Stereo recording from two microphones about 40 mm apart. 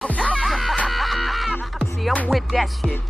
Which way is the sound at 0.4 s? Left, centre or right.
Centre.